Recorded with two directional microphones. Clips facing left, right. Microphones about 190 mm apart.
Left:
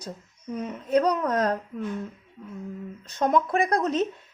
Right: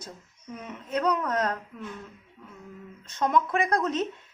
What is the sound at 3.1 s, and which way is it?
Speech, 35° left (ahead or behind).